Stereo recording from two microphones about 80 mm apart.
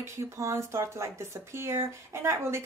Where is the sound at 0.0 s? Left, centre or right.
Right.